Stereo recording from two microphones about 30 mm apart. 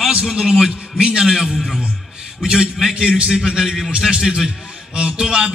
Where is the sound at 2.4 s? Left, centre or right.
Right.